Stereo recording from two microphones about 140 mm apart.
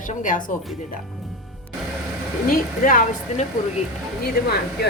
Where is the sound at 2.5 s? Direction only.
70° left (ahead or behind).